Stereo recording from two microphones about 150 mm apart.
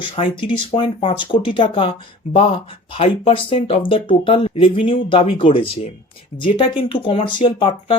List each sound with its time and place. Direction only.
0.0 s speech: 35° left (ahead or behind)